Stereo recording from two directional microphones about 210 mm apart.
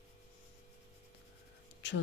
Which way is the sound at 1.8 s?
55° left (ahead or behind).